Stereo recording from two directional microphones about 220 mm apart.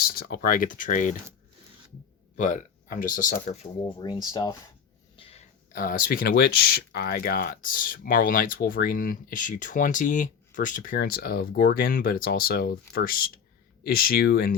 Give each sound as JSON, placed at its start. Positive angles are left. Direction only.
{"t": 0.0, "sound": "speech", "side_deg": 40}
{"t": 2.3, "sound": "speech", "side_deg": 35}